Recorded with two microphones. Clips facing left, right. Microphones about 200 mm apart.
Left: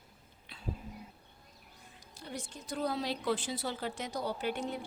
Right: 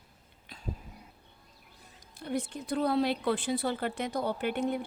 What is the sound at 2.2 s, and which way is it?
A woman's voice, 60° right (ahead or behind).